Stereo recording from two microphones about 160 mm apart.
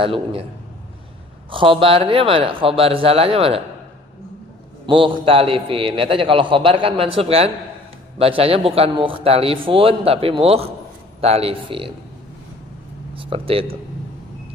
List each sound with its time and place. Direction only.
0.0 s a man's voice: 35° right (ahead or behind)
1.5 s a man's voice: 35° right (ahead or behind)
4.9 s a man's voice: 35° right (ahead or behind)
13.1 s speech: 35° right (ahead or behind)